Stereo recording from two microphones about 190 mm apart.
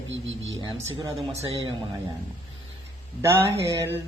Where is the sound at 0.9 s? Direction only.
30° right (ahead or behind).